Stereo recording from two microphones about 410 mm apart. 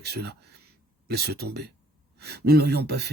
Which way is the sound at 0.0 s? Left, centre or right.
Right.